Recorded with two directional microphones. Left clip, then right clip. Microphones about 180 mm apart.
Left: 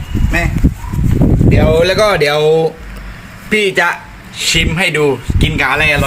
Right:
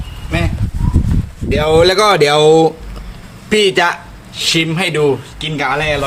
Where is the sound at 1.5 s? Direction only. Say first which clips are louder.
Right 2 dB; 40° right (ahead or behind).